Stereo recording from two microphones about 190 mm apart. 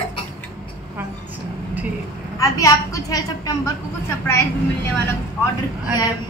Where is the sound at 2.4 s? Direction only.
20° left (ahead or behind).